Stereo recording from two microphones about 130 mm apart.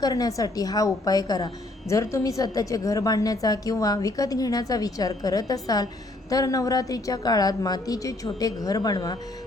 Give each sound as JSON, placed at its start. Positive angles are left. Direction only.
{"t": 0.0, "sound": "a woman's voice", "side_deg": 30}